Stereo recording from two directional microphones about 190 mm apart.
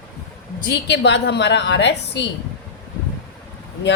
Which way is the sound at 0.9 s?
65° left (ahead or behind).